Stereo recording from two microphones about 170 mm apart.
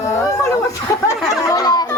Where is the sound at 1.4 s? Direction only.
20° left (ahead or behind).